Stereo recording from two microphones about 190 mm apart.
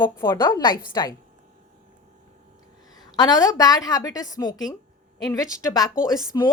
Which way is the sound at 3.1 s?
20° left (ahead or behind).